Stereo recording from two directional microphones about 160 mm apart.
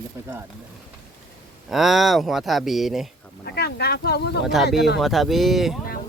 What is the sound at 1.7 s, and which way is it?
Speech, centre (ahead or behind).